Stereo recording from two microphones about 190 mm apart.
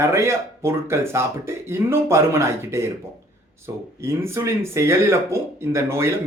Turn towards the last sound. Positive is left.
turn(degrees=-15)  # may be behind; listen again after turning